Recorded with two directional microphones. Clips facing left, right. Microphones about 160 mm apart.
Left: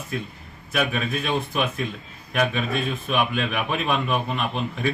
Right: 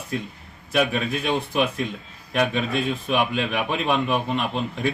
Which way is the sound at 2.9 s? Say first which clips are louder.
Right 1 dB; 10° right (ahead or behind).